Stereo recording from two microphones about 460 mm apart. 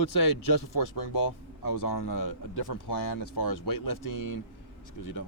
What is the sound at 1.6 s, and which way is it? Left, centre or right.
Speech, left.